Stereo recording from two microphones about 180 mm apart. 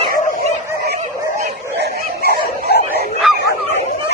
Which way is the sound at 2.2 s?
60° left (ahead or behind).